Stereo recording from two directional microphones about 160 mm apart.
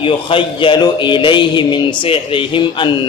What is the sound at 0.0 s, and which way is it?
A man's voice, 30° left (ahead or behind).